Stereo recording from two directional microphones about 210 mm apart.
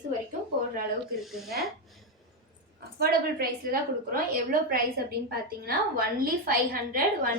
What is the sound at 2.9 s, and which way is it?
A woman's voice, 45° right (ahead or behind).